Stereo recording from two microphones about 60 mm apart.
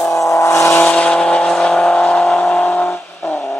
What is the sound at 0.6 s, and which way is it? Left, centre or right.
Vehicle, centre.